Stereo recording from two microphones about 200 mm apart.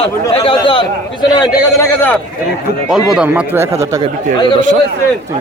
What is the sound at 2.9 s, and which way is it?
Speech, 5° right (ahead or behind).